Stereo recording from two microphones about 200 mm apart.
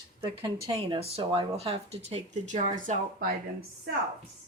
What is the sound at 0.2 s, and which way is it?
Speech, 25° right (ahead or behind).